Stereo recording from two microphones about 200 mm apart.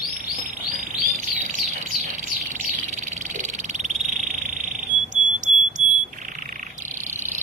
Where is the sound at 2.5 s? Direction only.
40° right (ahead or behind).